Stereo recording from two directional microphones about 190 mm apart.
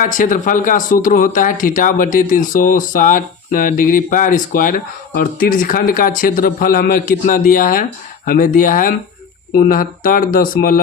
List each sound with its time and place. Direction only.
0.0 s speech: 45° left (ahead or behind)